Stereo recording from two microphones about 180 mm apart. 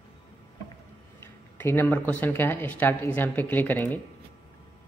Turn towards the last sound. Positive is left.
turn(degrees=10)  # may be behind; listen again after turning